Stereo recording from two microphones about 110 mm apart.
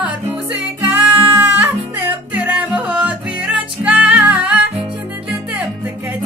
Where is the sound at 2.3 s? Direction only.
15° right (ahead or behind).